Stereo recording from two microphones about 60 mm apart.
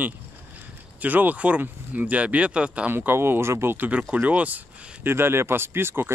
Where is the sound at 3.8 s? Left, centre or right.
Right.